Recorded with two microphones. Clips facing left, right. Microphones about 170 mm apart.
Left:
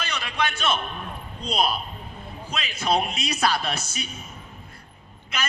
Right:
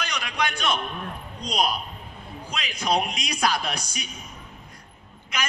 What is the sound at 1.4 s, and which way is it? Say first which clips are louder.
Speech: left 1 dB; 15° right (ahead or behind).